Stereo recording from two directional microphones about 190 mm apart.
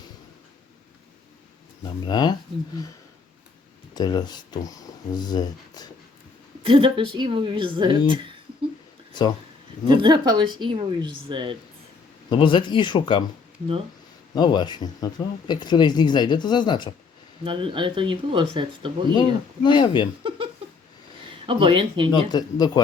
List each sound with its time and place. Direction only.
1.8 s speech: 25° left (ahead or behind)
3.9 s speech: 20° left (ahead or behind)
6.6 s speech: 25° right (ahead or behind)
9.8 s speech: 25° right (ahead or behind)
12.3 s speech: 25° left (ahead or behind)
14.3 s speech: 25° left (ahead or behind)
17.4 s speech: 25° right (ahead or behind)
19.1 s speech: 25° left (ahead or behind)
21.4 s speech: 25° right (ahead or behind)
22.1 s speech: 20° left (ahead or behind)